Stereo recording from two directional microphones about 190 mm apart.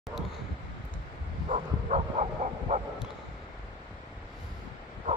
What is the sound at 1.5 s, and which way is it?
Bow-wow, 40° right (ahead or behind).